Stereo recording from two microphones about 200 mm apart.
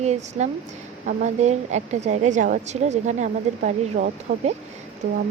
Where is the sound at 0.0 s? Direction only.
35° right (ahead or behind).